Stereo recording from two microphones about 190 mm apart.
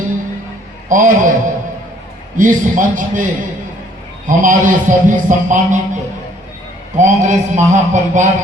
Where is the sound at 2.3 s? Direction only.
45° right (ahead or behind).